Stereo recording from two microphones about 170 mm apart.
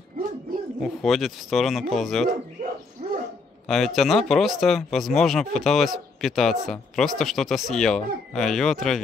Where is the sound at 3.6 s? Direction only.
Centre (ahead or behind).